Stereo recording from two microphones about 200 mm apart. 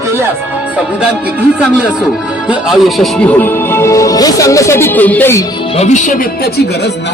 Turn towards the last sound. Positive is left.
turn(degrees=50)  # may be behind; listen again after turning